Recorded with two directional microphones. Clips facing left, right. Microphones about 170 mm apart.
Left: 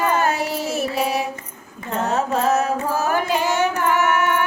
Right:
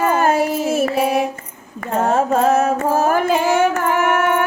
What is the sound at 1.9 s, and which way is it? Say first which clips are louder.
Music: right 5 dB; 50° right (ahead or behind).